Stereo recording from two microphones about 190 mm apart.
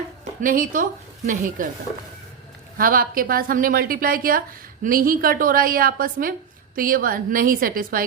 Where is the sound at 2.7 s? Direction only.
50° right (ahead or behind).